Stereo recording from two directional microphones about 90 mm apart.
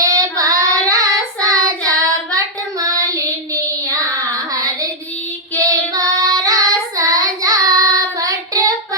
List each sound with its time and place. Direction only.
0.0 s child singing: 40° right (ahead or behind)